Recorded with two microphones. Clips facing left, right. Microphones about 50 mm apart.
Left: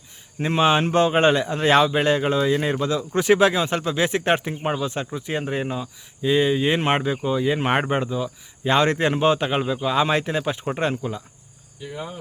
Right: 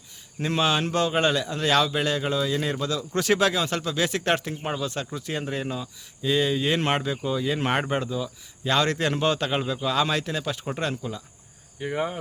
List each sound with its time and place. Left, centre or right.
0.3 s speech: left
11.8 s cricket: right